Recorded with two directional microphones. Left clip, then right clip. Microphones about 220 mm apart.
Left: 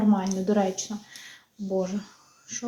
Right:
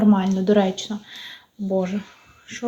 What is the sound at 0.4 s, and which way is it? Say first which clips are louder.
Speech: right 7 dB; 25° right (ahead or behind).